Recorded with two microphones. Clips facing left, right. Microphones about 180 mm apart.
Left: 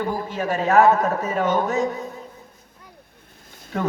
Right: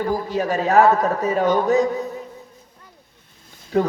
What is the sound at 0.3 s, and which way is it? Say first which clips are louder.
A man's voice: right 2 dB; 40° right (ahead or behind).